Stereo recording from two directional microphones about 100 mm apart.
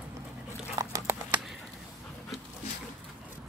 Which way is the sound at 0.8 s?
40° right (ahead or behind).